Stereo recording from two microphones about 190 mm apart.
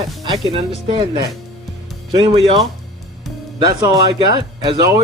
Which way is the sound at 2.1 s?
30° right (ahead or behind).